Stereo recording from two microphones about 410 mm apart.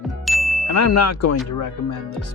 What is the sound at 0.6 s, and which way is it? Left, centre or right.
Speech, left.